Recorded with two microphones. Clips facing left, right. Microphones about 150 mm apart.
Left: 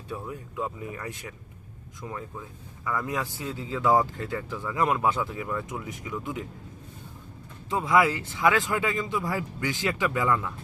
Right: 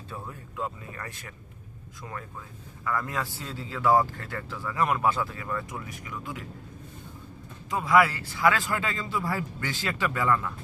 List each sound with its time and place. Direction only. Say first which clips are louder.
0.1 s speech: left 5 dB; 15° left (ahead or behind)
2.8 s speech: left 1 dB; 15° left (ahead or behind)
7.7 s speech: even; 20° left (ahead or behind)